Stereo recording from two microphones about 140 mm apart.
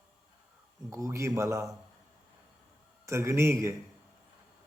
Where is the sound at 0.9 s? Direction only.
20° right (ahead or behind).